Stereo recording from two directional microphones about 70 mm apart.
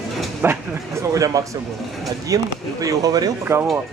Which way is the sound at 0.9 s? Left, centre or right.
Right.